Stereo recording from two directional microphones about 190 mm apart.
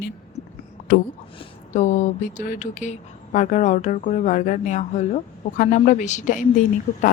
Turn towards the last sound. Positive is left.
turn(degrees=40)  # may be behind; listen again after turning